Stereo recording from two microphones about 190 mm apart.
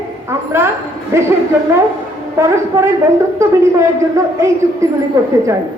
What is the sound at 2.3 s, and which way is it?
Speech, 15° right (ahead or behind).